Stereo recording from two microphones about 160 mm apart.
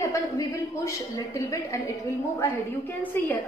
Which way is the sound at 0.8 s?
20° left (ahead or behind).